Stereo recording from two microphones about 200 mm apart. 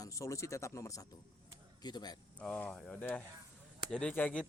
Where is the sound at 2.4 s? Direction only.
5° left (ahead or behind).